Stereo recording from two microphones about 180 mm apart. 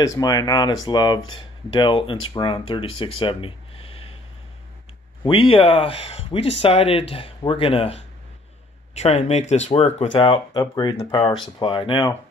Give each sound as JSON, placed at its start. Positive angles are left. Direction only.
{"t": 0.0, "sound": "speech", "side_deg": 20}
{"t": 5.2, "sound": "speech", "side_deg": 30}